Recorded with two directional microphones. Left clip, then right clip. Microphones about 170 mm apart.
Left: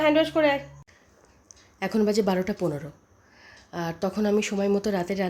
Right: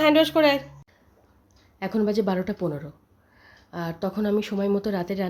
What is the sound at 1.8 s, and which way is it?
Speech, 5° left (ahead or behind).